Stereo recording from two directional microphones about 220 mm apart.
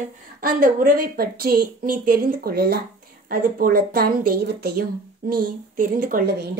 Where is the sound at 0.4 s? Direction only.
40° right (ahead or behind).